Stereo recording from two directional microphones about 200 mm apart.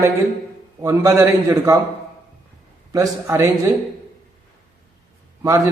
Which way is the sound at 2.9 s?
15° right (ahead or behind).